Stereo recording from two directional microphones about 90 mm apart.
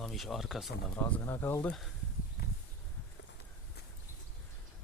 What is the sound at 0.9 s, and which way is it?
Speech, 20° left (ahead or behind).